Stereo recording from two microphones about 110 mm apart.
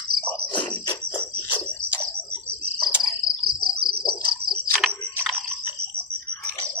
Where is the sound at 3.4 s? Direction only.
45° left (ahead or behind).